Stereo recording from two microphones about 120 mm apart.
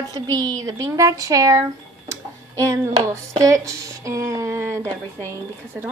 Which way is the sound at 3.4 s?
25° right (ahead or behind).